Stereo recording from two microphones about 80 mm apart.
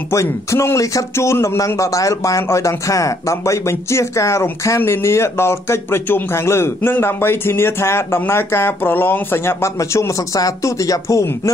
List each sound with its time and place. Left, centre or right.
0.1 s speech: left